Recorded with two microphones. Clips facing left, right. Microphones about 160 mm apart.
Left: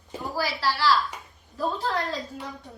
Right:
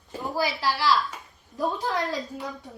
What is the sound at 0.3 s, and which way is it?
A woman's voice, 20° right (ahead or behind).